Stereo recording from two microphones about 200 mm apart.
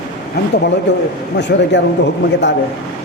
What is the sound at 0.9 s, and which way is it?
Speech, 60° left (ahead or behind).